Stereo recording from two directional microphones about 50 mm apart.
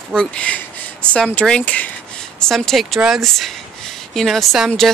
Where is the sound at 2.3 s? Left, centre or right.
Centre.